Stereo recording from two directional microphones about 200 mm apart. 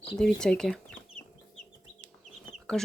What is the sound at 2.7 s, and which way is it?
Speech, centre (ahead or behind).